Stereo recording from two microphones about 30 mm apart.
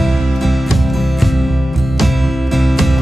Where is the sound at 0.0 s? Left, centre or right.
Centre.